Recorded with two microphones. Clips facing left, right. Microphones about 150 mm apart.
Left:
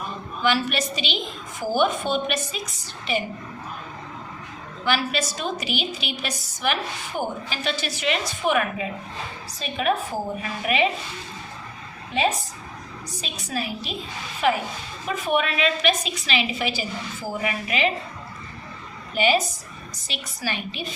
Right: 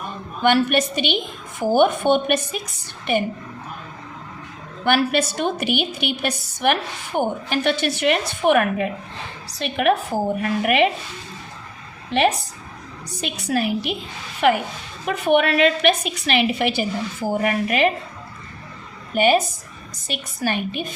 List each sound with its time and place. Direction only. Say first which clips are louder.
0.4 s a woman's voice: right 6 dB; 55° right (ahead or behind)
4.9 s a woman's voice: right 6 dB; 60° right (ahead or behind)
9.5 s a woman's voice: right 5 dB; 70° right (ahead or behind)
12.1 s a woman's voice: right 5 dB; 90° right
13.2 s a woman's voice: right 8 dB; 65° right (ahead or behind)
19.1 s a woman's voice: right 4 dB; 50° right (ahead or behind)